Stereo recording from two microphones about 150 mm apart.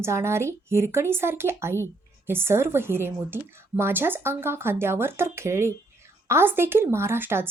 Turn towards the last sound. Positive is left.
turn(degrees=-15)  # may be behind; listen again after turning